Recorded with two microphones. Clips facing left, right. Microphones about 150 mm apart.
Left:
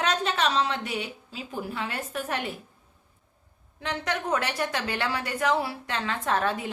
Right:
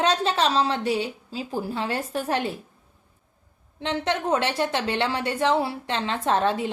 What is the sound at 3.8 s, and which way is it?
A woman's voice, 25° right (ahead or behind).